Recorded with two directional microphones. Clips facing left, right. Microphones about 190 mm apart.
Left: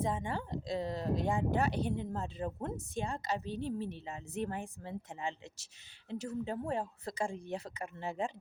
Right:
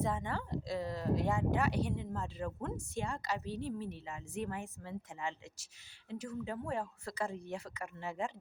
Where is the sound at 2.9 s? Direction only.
20° left (ahead or behind).